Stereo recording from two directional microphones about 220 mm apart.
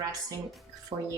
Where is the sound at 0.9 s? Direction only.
25° right (ahead or behind).